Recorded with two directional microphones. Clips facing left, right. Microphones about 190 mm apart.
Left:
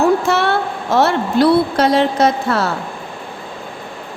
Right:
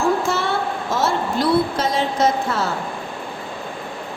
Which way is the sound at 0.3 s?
65° left (ahead or behind).